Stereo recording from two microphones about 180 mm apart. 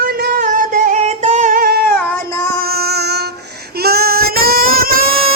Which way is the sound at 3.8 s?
60° right (ahead or behind).